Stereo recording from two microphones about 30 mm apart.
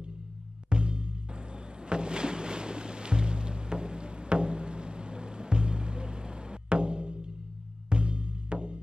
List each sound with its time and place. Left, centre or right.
0.7 s music: right